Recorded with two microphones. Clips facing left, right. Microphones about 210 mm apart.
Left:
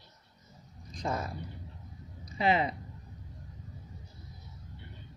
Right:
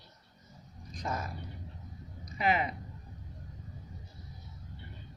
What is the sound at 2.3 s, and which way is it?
Speech, 30° left (ahead or behind).